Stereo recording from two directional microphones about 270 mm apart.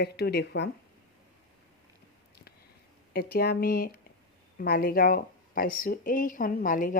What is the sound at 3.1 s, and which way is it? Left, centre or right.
Speech, left.